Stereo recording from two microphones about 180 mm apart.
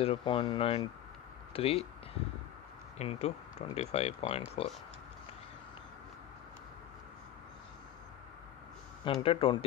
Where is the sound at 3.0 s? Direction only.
35° left (ahead or behind).